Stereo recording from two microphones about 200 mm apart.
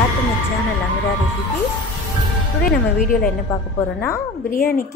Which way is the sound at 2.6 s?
45° left (ahead or behind).